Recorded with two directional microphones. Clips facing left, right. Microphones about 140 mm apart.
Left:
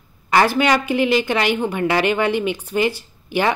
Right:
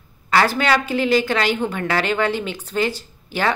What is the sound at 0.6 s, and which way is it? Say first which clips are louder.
A woman's voice: left 2 dB; 15° left (ahead or behind).